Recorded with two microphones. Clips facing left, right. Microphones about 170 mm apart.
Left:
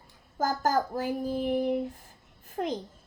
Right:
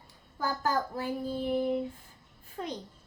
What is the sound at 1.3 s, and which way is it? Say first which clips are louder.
Speech: left 1 dB; 65° left (ahead or behind).